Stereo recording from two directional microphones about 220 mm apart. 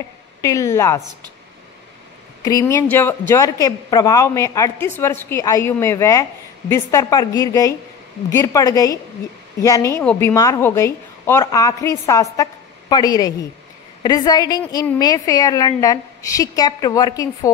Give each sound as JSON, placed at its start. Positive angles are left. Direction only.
{"t": 0.4, "sound": "a woman's voice", "side_deg": 15}
{"t": 2.4, "sound": "a woman's voice", "side_deg": 15}